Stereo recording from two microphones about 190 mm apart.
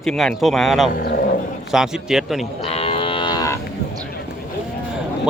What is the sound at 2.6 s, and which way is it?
Livestock, 30° left (ahead or behind).